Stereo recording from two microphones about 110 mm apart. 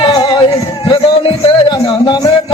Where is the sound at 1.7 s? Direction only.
40° left (ahead or behind).